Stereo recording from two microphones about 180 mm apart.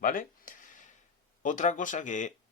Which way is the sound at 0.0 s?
50° left (ahead or behind).